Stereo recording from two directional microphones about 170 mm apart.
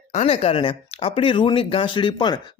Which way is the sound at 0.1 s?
40° left (ahead or behind).